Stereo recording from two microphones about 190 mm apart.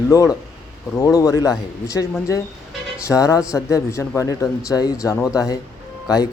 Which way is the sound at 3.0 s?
15° left (ahead or behind).